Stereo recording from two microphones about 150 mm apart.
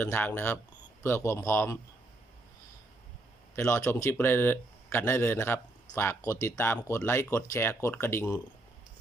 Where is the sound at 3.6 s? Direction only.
15° left (ahead or behind).